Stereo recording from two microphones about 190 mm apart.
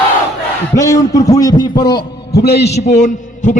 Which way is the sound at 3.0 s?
40° left (ahead or behind).